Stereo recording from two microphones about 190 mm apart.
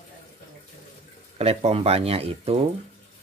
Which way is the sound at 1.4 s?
30° right (ahead or behind).